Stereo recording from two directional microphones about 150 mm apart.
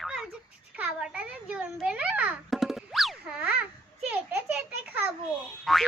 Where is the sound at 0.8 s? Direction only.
5° right (ahead or behind).